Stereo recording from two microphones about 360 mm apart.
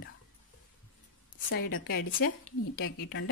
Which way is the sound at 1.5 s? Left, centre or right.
Left.